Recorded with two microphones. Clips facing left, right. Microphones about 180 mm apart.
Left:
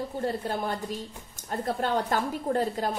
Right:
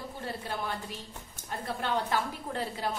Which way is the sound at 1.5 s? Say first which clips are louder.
Left 5 dB; 45° left (ahead or behind).